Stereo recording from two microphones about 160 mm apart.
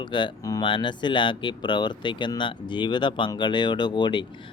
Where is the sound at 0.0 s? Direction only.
30° left (ahead or behind).